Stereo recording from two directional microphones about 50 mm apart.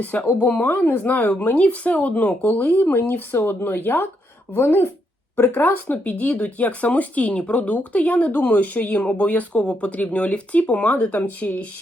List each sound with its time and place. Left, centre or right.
0.0 s speech: left